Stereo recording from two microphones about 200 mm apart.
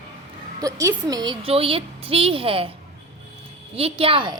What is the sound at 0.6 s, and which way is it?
A woman's voice, 15° right (ahead or behind).